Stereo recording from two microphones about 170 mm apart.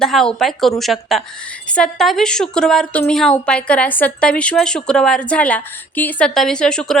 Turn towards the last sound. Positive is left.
turn(degrees=5)  # may be behind; listen again after turning